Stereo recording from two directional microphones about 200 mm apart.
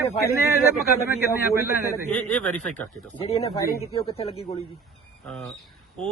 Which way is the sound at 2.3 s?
10° left (ahead or behind).